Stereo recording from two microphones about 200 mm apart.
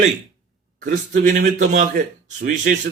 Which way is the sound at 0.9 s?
40° right (ahead or behind).